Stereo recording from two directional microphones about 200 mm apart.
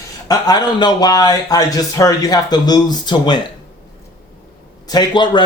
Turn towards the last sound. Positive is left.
turn(degrees=20)  # may be behind; listen again after turning